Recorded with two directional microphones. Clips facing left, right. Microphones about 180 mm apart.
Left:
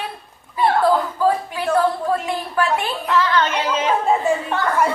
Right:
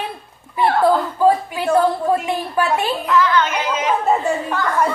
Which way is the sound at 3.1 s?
30° left (ahead or behind).